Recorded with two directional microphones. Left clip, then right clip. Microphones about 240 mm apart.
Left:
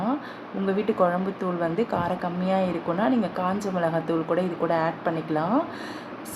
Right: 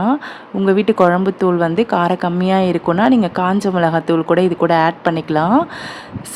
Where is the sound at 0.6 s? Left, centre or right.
Right.